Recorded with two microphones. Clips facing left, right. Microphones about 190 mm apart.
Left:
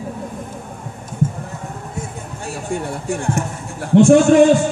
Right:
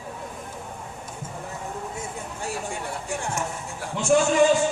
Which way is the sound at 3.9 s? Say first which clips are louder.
Left 10 dB; 60° left (ahead or behind).